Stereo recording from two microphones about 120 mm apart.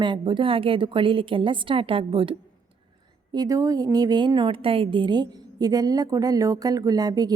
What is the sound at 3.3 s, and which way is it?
A woman's voice, 30° right (ahead or behind).